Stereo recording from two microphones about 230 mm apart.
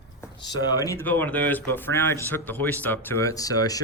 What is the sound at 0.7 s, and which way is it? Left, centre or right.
A man's voice, centre.